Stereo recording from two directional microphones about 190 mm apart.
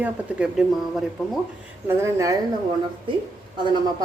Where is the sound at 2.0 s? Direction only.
15° right (ahead or behind).